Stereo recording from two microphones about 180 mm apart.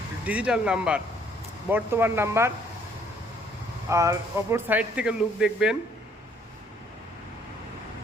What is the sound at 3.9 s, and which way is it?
A man's voice, 15° right (ahead or behind).